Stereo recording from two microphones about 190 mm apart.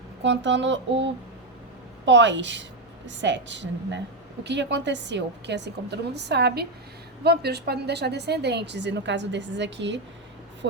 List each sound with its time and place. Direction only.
0.2 s a woman's voice: 70° right (ahead or behind)